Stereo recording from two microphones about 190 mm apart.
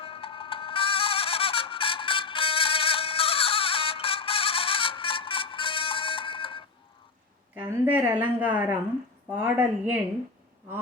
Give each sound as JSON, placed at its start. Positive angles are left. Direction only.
{"t": 0.0, "sound": "music", "side_deg": 30}
{"t": 7.5, "sound": "a woman's voice", "side_deg": -10}